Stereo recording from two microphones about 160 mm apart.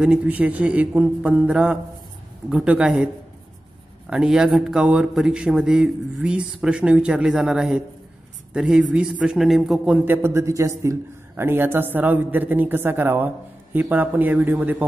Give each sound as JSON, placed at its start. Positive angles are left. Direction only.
{"t": 0.0, "sound": "a woman's voice", "side_deg": -5}
{"t": 4.1, "sound": "a woman's voice", "side_deg": -5}